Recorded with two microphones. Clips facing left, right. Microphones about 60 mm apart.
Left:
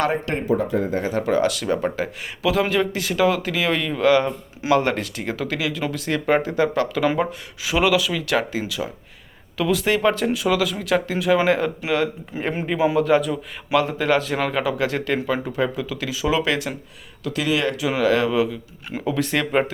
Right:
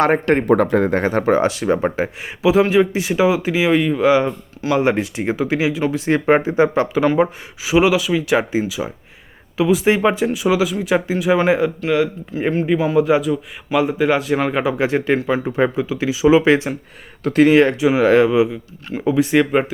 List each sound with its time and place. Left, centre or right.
0.0 s speech: right
7.0 s speech: centre
7.6 s speech: centre
10.2 s speech: centre
13.0 s speech: centre
13.8 s speech: centre
14.5 s speech: right
17.2 s speech: right; by 19.7 s centre